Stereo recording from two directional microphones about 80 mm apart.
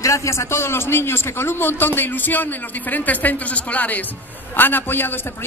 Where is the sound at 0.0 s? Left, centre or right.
Left.